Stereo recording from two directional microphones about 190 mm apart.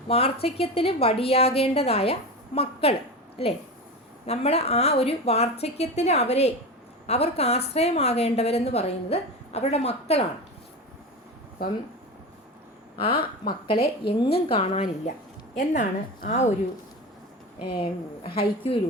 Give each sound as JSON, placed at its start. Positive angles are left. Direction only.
{"t": 0.1, "sound": "a woman's voice", "side_deg": 30}
{"t": 13.1, "sound": "a woman's voice", "side_deg": 50}
{"t": 14.3, "sound": "a woman's voice", "side_deg": 30}
{"t": 17.7, "sound": "speech", "side_deg": 25}